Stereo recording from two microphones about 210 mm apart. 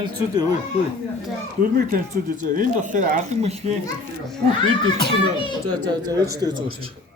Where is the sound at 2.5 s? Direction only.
40° right (ahead or behind).